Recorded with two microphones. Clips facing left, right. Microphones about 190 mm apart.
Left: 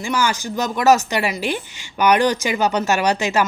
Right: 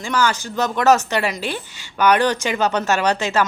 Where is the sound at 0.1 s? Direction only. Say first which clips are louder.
Right 1 dB; 10° left (ahead or behind).